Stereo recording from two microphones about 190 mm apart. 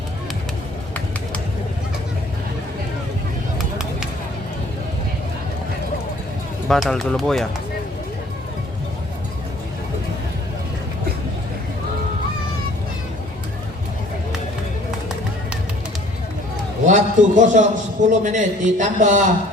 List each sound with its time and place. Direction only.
6.7 s speech: centre (ahead or behind)
16.8 s a man's voice: 40° right (ahead or behind)